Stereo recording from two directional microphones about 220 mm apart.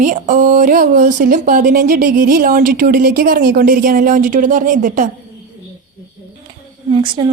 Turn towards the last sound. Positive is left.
turn(degrees=-20)  # may be behind; listen again after turning